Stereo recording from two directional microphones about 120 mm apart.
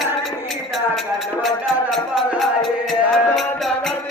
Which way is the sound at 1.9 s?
Centre (ahead or behind).